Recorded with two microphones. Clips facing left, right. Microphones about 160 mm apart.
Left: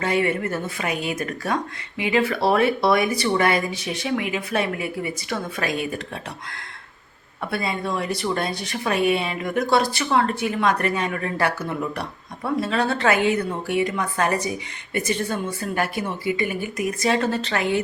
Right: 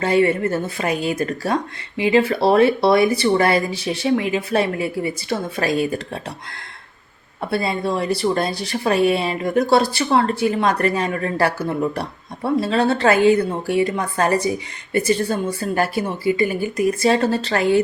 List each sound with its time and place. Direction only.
0.0 s speech: 30° right (ahead or behind)
7.5 s speech: 30° right (ahead or behind)